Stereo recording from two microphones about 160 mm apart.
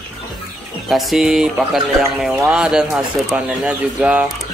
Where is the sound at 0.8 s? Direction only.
Centre (ahead or behind).